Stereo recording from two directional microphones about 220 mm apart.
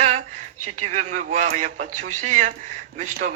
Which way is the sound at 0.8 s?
35° right (ahead or behind).